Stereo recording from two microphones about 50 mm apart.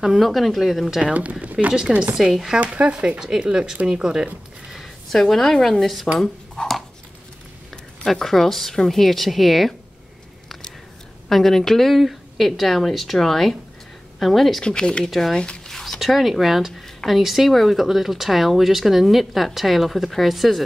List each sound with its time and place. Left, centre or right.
0.2 s speech: centre
0.8 s speech: centre
1.4 s a sound: right
1.9 s speech: centre
2.6 s speech: right
4.8 s a woman's voice: centre
8.1 s speech: centre
11.2 s speech: centre
14.6 s speech: centre
15.0 s speech: centre
15.3 s speech: centre
15.7 s speech: centre